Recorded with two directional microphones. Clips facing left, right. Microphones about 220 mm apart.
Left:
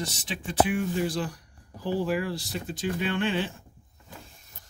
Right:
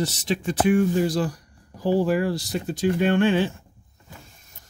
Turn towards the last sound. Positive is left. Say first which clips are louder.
# right 8 dB
turn(degrees=-45)  # may be behind; listen again after turning